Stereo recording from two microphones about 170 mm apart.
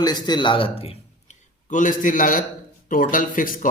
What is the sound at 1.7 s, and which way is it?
A man's voice, 50° left (ahead or behind).